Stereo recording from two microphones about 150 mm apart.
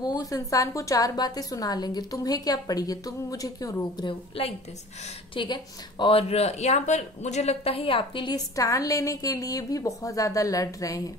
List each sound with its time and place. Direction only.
0.0 s speech: 25° left (ahead or behind)
4.1 s a woman's voice: 40° left (ahead or behind); by 11.0 s 25° left (ahead or behind)